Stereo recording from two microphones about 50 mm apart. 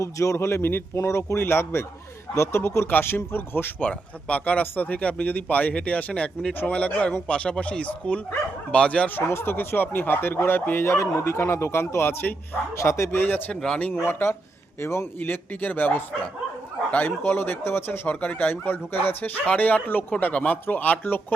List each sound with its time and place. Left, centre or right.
0.0 s a man's voice: left
1.4 s speech: left
2.3 s speech: left
3.8 s speech: left
4.6 s speech: left
4.9 s speech: left
9.0 s speech: left
10.8 s speech: left
11.9 s speech: left
12.7 s speech: left
13.1 s speech: left
14.8 s speech: left
15.2 s speech: left
17.2 s speech: left